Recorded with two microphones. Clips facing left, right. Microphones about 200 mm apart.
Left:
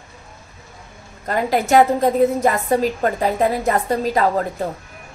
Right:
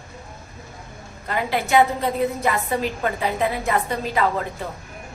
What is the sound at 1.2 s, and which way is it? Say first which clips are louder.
A woman's voice: left 5 dB; 40° left (ahead or behind).